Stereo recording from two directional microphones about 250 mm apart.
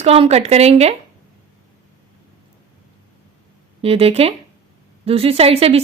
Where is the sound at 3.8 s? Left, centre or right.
Right.